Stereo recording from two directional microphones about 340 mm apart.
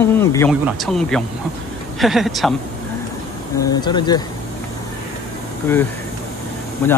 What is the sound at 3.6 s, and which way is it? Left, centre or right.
Speech, centre.